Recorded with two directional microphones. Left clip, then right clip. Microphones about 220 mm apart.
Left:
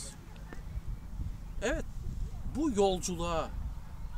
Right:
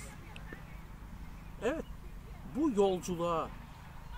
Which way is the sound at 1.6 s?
20° left (ahead or behind).